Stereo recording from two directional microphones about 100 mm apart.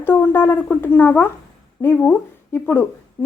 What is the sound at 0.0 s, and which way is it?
Speech, 20° left (ahead or behind).